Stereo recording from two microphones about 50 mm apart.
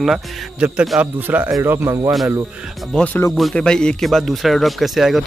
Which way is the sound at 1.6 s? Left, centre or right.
Right.